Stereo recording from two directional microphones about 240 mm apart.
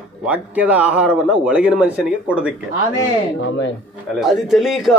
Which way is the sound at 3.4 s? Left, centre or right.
Left.